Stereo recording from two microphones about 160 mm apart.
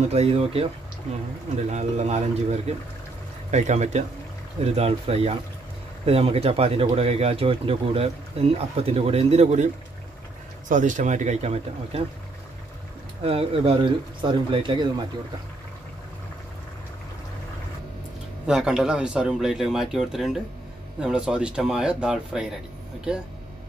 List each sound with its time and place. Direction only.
0.1 s speech: 40° right (ahead or behind)
10.7 s speech: 55° right (ahead or behind)
13.2 s speech: 35° right (ahead or behind)
18.5 s speech: 5° right (ahead or behind)